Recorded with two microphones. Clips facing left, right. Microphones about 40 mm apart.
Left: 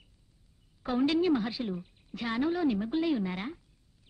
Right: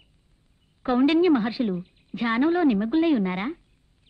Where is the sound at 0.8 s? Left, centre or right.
Right.